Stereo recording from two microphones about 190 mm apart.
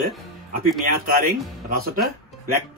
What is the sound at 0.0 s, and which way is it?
Speech, 45° right (ahead or behind).